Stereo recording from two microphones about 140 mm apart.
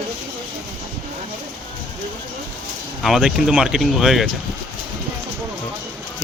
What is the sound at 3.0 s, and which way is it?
Speech, centre (ahead or behind).